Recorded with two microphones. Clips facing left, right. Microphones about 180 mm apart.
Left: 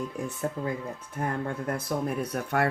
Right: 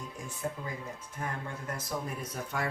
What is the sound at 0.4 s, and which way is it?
Speech, 50° left (ahead or behind).